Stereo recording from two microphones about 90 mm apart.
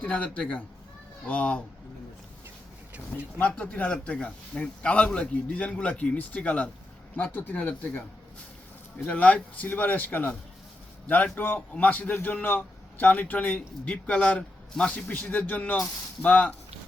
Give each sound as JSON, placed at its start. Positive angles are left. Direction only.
{"t": 0.0, "sound": "a man's voice", "side_deg": 15}
{"t": 3.3, "sound": "a man's voice", "side_deg": 20}
{"t": 9.0, "sound": "a man's voice", "side_deg": 15}